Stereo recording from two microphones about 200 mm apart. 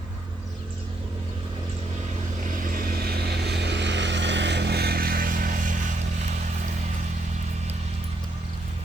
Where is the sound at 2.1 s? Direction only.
40° right (ahead or behind).